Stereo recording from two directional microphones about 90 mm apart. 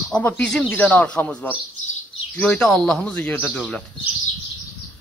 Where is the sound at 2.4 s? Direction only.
15° left (ahead or behind).